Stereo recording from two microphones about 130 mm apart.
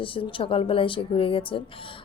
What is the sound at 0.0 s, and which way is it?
Speech, 40° left (ahead or behind).